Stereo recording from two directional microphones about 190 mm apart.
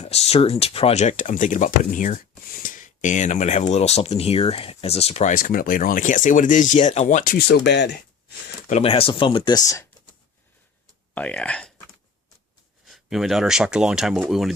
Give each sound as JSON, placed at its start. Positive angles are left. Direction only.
{"t": 0.0, "sound": "speech", "side_deg": 35}
{"t": 8.6, "sound": "speech", "side_deg": 35}
{"t": 11.1, "sound": "speech", "side_deg": 5}
{"t": 12.8, "sound": "speech", "side_deg": 0}